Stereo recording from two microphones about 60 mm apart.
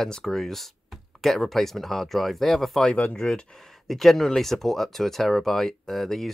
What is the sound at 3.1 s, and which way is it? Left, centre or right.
Speech, centre.